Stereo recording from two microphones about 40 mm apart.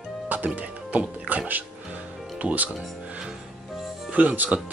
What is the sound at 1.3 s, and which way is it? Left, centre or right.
Speech, right.